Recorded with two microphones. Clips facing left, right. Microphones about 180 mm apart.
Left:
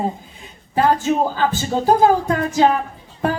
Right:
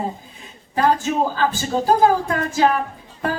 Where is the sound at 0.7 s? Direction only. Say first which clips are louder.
Left 2 dB; 20° left (ahead or behind).